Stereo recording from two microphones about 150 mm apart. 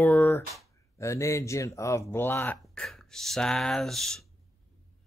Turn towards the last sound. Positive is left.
turn(degrees=0)  # may be behind; listen again after turning